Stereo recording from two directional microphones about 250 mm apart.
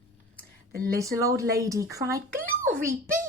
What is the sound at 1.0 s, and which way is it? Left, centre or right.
Speech, centre.